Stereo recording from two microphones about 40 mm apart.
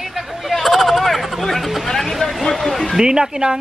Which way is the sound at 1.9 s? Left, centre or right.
Centre.